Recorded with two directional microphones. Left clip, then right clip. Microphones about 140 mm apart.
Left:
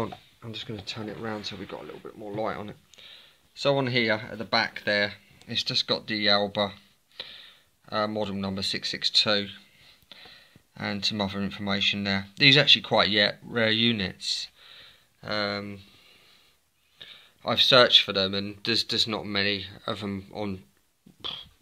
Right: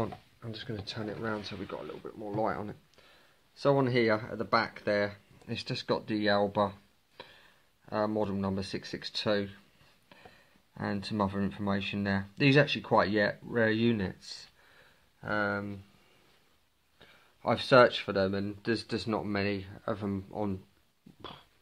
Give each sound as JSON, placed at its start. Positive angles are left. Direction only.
{"t": 0.0, "sound": "speech", "side_deg": 25}
{"t": 3.9, "sound": "speech", "side_deg": 5}
{"t": 5.7, "sound": "speech", "side_deg": -5}
{"t": 10.7, "sound": "speech", "side_deg": 5}
{"t": 15.2, "sound": "speech", "side_deg": 5}
{"t": 17.0, "sound": "a sound", "side_deg": 5}
{"t": 17.5, "sound": "speech", "side_deg": -10}
{"t": 21.2, "sound": "a sound", "side_deg": 5}